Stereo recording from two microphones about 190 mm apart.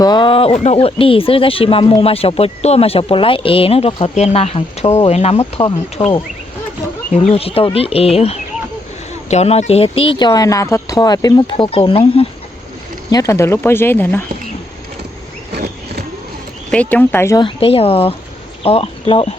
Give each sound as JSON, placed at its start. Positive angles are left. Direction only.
{"t": 0.0, "sound": "speech", "side_deg": 25}
{"t": 7.1, "sound": "speech", "side_deg": 35}
{"t": 13.1, "sound": "speech", "side_deg": 20}
{"t": 15.5, "sound": "a sound", "side_deg": -55}
{"t": 16.7, "sound": "speech", "side_deg": 5}
{"t": 17.4, "sound": "speech", "side_deg": 30}